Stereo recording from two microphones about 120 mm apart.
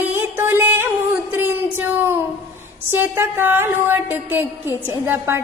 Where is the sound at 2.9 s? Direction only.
20° right (ahead or behind).